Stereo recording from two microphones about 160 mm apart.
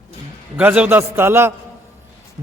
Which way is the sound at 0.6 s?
10° right (ahead or behind).